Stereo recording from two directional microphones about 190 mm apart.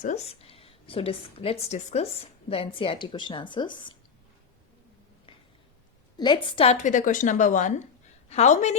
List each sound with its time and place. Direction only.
0.0 s a woman's voice: 35° left (ahead or behind)
6.1 s a woman's voice: 25° left (ahead or behind)